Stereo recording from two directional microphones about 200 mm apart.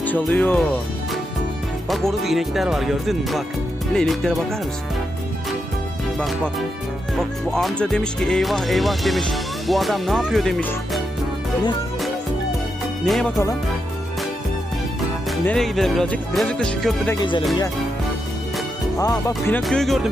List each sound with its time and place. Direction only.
0.0 s speech: 10° left (ahead or behind)
1.9 s speech: centre (ahead or behind)
7.2 s speech: centre (ahead or behind)
13.1 s speech: centre (ahead or behind)
15.3 s speech: centre (ahead or behind)
17.2 s music: 25° left (ahead or behind)
18.9 s speech: 15° left (ahead or behind)
19.5 s speech: 5° left (ahead or behind)